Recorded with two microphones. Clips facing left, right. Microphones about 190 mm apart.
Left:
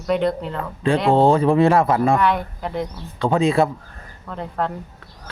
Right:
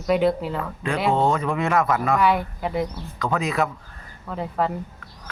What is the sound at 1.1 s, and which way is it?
Speech, 30° left (ahead or behind).